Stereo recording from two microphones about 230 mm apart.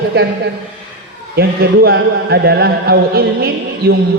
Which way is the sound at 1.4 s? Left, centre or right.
Right.